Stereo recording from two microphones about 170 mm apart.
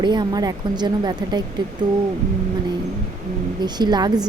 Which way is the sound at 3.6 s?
25° right (ahead or behind).